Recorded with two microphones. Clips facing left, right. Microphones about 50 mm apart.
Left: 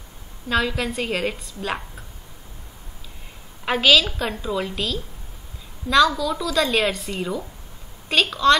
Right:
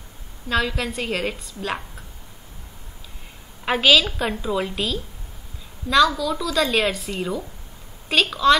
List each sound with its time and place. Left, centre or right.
0.5 s a woman's voice: centre
3.6 s a woman's voice: centre